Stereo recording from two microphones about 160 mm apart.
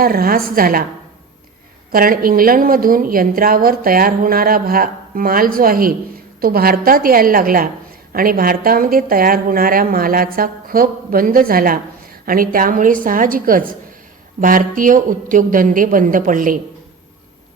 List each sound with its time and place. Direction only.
0.0 s a woman's voice: 65° right (ahead or behind)
1.9 s a woman's voice: 65° right (ahead or behind)